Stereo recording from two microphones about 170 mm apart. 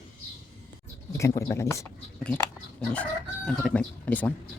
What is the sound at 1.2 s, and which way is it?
Speech, 15° left (ahead or behind).